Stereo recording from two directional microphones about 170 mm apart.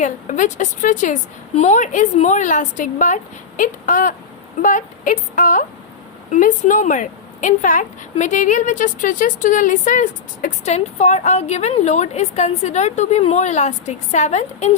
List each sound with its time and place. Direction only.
0.0 s a woman's voice: 45° left (ahead or behind)